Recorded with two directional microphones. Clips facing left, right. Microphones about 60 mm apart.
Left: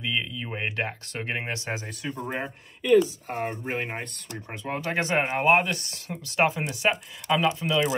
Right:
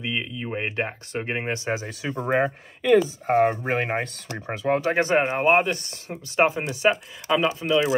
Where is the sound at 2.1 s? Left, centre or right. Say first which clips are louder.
Right 12 dB; right.